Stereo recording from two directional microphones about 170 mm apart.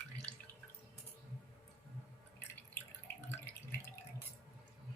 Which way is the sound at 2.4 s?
10° left (ahead or behind).